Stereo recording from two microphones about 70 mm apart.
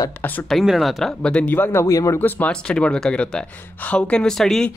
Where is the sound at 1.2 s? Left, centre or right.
Centre.